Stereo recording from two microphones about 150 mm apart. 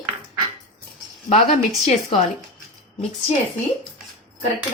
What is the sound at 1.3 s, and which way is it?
Speech, 45° left (ahead or behind).